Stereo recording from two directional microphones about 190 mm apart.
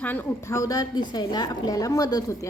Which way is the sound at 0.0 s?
10° left (ahead or behind).